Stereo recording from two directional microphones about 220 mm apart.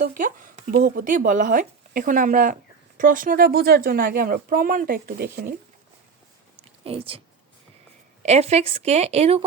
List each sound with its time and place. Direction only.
0.0 s speech: 40° right (ahead or behind)
6.6 s a sound: 25° right (ahead or behind)
8.2 s a woman's voice: 30° right (ahead or behind)